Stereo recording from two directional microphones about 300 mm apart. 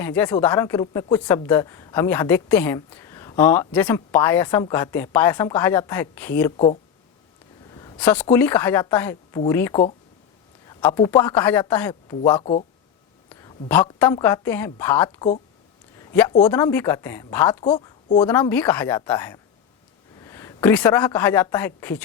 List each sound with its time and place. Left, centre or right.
0.0 s a woman's voice: centre
7.7 s a woman's voice: centre
13.3 s a sound: centre
13.7 s a woman's voice: centre
16.0 s a sound: centre
16.5 s a woman's voice: centre